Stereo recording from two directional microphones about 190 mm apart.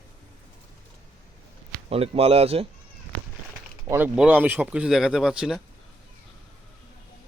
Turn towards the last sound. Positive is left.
turn(degrees=0)  # may be behind; listen again after turning